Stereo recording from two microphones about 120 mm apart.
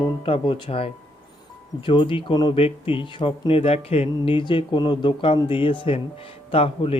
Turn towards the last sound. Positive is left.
turn(degrees=50)  # may be behind; listen again after turning